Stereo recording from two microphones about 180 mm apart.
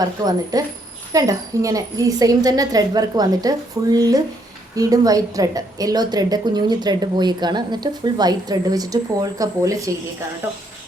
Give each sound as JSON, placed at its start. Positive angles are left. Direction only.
{"t": 0.0, "sound": "a woman's voice", "side_deg": -20}